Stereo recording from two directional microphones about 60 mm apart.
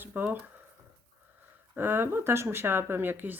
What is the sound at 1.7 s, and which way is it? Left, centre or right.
A woman's voice, right.